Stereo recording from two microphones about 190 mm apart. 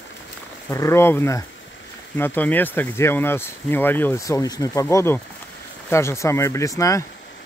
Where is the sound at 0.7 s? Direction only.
15° left (ahead or behind).